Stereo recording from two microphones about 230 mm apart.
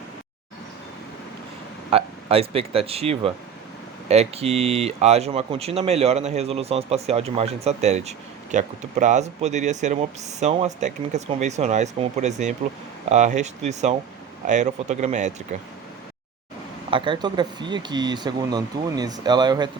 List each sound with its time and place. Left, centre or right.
1.9 s speech: right
16.9 s speech: right